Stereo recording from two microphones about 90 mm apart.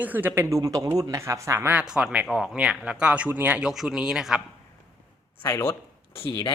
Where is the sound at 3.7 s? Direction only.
5° right (ahead or behind).